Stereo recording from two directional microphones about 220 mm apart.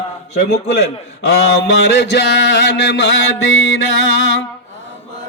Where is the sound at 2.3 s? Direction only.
55° left (ahead or behind).